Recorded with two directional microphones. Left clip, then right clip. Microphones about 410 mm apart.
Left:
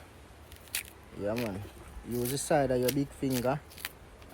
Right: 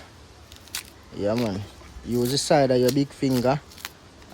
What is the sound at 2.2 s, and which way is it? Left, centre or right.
Speech, right.